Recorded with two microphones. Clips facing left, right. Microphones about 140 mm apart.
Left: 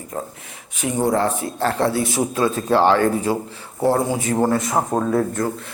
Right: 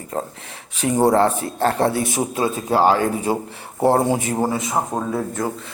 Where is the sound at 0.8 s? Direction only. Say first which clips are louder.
Right 4 dB; 40° right (ahead or behind).